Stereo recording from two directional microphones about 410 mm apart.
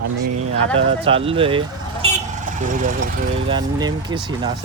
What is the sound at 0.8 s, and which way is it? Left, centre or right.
Speech, centre.